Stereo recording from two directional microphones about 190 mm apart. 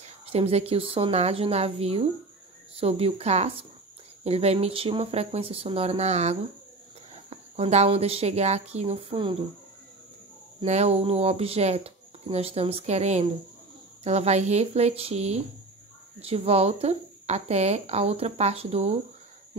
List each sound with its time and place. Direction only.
0.0 s speech: 30° right (ahead or behind)
10.6 s speech: 35° right (ahead or behind)